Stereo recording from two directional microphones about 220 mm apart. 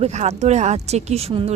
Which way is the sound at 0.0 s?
30° right (ahead or behind).